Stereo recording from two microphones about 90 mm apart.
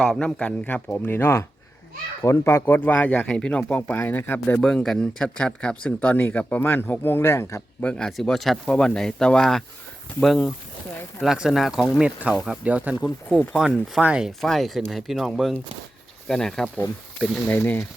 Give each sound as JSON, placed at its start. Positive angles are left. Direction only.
{"t": 0.0, "sound": "speech", "side_deg": 5}
{"t": 3.6, "sound": "speech", "side_deg": 25}
{"t": 4.5, "sound": "speech", "side_deg": 5}
{"t": 7.8, "sound": "speech", "side_deg": 10}
{"t": 13.5, "sound": "speech", "side_deg": -5}
{"t": 17.5, "sound": "speech", "side_deg": 25}